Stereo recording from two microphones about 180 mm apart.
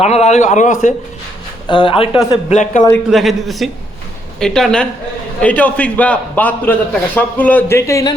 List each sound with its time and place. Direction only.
0.0 s a man's voice: 35° left (ahead or behind)
1.6 s speech: 25° left (ahead or behind)
2.3 s a man's voice: 40° left (ahead or behind)
3.1 s a woman's voice: centre (ahead or behind); by 8.1 s 15° left (ahead or behind)